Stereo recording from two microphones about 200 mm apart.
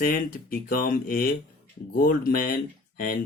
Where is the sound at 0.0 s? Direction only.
45° left (ahead or behind).